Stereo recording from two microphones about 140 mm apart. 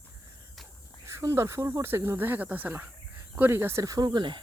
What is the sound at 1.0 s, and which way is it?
Speech, 20° right (ahead or behind).